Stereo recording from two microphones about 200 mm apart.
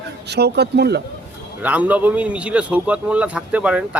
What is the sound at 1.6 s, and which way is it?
Speech, 5° right (ahead or behind).